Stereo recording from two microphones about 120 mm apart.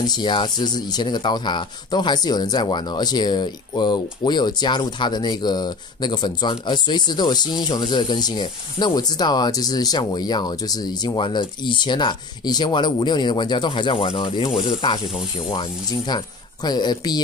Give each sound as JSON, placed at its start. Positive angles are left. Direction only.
{"t": 0.0, "sound": "speech", "side_deg": 35}